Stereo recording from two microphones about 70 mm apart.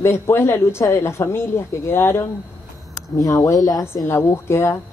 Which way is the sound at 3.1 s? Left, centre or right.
Left.